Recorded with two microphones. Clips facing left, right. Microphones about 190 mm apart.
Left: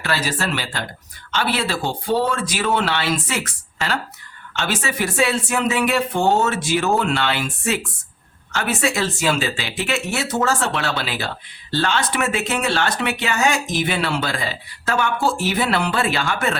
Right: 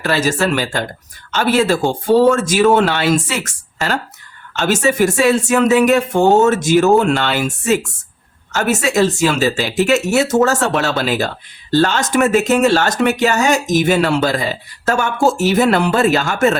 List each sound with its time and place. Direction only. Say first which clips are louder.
0.0 s speech: right 7 dB; 45° right (ahead or behind)